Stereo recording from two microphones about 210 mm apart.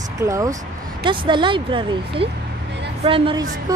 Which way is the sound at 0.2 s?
15° right (ahead or behind).